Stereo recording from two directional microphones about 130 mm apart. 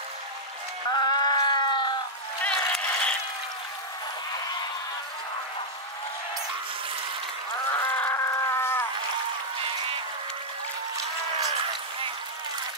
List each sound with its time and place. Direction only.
0.9 s sheep: 35° left (ahead or behind)
2.4 s a sound: 10° left (ahead or behind)
7.8 s livestock: 15° left (ahead or behind)